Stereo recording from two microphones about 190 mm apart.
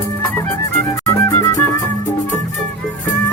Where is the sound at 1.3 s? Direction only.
15° left (ahead or behind).